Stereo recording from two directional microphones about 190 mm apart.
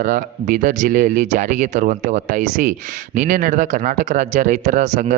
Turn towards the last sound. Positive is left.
turn(degrees=-40)  # may be behind; listen again after turning